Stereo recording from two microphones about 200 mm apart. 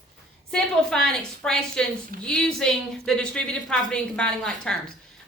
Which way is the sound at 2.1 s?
45° right (ahead or behind).